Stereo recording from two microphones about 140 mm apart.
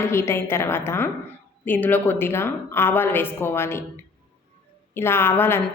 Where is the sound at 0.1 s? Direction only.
20° left (ahead or behind).